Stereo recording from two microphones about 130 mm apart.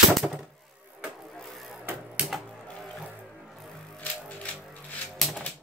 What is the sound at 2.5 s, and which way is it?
Music, 5° left (ahead or behind).